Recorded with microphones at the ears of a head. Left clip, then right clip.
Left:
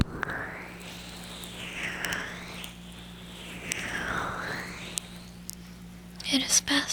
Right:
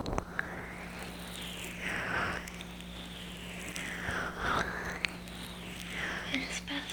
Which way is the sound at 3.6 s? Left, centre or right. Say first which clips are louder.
Left 7 dB; left.